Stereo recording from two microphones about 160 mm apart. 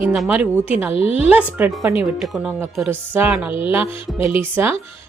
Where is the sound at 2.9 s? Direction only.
15° right (ahead or behind).